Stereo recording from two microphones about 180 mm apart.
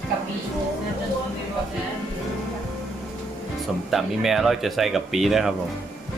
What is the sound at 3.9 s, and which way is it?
Speech, centre (ahead or behind).